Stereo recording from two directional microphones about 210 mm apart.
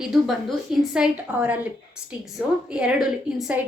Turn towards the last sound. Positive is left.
turn(degrees=-5)  # may be behind; listen again after turning